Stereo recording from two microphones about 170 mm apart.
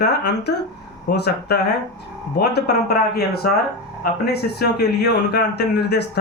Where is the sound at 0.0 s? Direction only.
80° left.